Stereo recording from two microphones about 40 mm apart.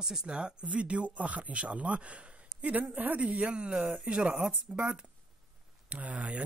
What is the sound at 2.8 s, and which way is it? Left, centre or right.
Speech, right.